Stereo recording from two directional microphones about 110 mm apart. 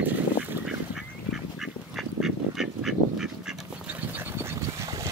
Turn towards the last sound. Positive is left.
turn(degrees=-30)  # may be behind; listen again after turning